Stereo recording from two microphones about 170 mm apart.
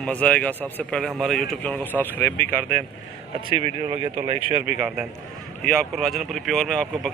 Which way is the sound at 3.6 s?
35° right (ahead or behind).